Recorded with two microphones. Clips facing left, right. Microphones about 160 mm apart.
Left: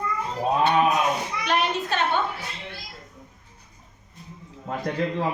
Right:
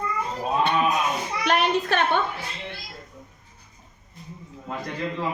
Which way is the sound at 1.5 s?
60° right (ahead or behind).